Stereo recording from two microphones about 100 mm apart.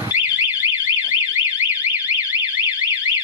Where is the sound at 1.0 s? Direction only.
15° right (ahead or behind).